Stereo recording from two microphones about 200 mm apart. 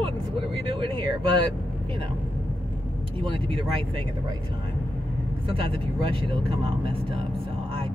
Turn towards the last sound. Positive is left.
turn(degrees=-25)  # may be behind; listen again after turning